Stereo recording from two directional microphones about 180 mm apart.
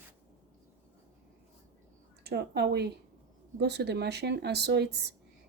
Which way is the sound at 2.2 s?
65° right (ahead or behind).